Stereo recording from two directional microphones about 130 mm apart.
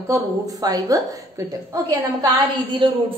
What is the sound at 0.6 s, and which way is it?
Speech, 25° right (ahead or behind).